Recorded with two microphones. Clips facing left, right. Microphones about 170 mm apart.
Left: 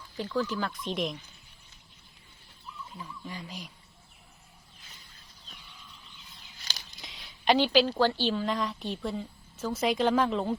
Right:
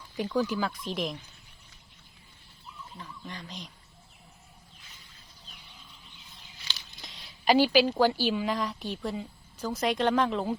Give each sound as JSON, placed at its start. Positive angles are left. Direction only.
{"t": 0.2, "sound": "speech", "side_deg": -15}
{"t": 3.0, "sound": "speech", "side_deg": 5}
{"t": 7.0, "sound": "a woman's voice", "side_deg": 0}